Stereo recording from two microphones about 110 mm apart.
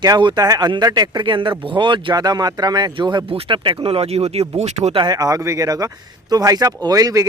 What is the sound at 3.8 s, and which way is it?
Speech, 65° right (ahead or behind).